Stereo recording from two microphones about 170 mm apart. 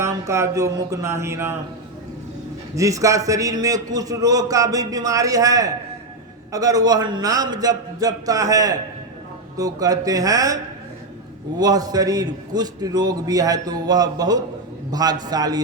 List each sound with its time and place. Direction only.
0.0 s speech: 15° right (ahead or behind)
2.7 s a man's voice: 20° right (ahead or behind)